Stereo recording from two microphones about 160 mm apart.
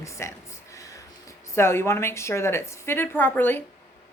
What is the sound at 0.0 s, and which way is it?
Speech, 15° left (ahead or behind).